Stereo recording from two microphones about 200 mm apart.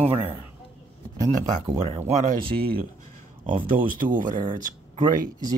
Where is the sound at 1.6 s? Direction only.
30° right (ahead or behind).